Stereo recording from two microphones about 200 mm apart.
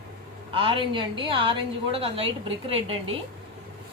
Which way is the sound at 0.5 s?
25° right (ahead or behind).